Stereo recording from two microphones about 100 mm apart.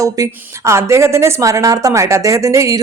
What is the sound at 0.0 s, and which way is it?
A woman's voice, 30° right (ahead or behind).